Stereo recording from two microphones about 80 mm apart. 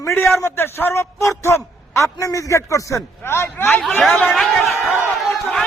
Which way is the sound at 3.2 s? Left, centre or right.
Left.